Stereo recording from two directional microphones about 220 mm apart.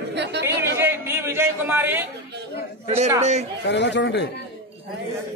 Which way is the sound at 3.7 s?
50° left (ahead or behind).